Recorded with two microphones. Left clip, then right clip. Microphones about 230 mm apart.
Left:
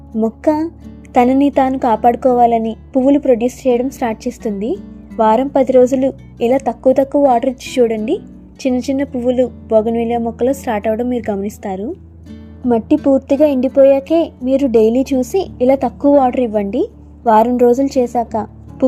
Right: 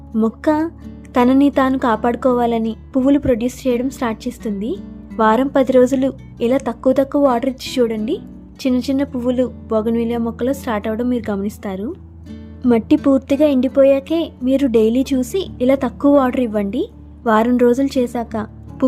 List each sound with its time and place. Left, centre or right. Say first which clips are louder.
0.1 s speech: left 1 dB; centre
0.4 s a woman's voice: left 3 dB; centre